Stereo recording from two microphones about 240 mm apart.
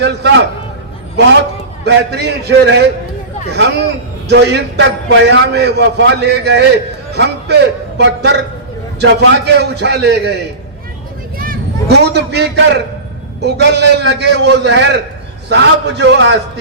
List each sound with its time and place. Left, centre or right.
0.0 s a sound: right
1.8 s a man's voice: right
4.3 s a man's voice: right
11.3 s a man's voice: right